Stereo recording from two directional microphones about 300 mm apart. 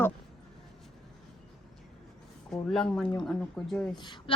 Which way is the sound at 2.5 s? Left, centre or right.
Centre.